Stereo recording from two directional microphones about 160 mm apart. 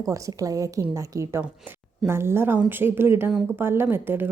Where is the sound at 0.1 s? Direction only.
20° right (ahead or behind).